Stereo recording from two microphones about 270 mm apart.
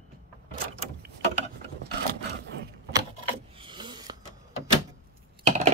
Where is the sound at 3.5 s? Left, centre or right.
Centre.